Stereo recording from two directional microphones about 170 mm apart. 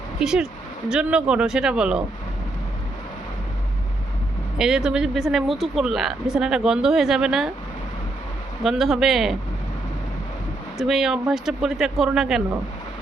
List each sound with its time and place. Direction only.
0.2 s speech: 5° right (ahead or behind)
4.5 s speech: 5° right (ahead or behind)
8.6 s speech: centre (ahead or behind)
10.8 s speech: centre (ahead or behind)